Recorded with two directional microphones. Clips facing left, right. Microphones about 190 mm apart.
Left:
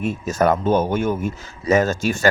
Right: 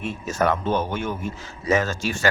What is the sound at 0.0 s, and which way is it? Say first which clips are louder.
A man's voice: left 4 dB; 40° left (ahead or behind).